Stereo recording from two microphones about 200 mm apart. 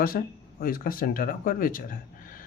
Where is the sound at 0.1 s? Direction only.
50° left (ahead or behind).